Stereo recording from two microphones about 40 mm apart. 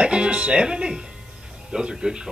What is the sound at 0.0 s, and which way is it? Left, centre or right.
Speech, right.